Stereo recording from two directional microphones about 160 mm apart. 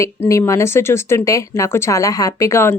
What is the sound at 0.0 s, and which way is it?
Speech, 20° left (ahead or behind).